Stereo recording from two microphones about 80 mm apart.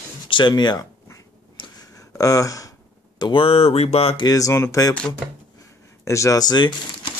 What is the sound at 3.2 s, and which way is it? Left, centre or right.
Speech, left.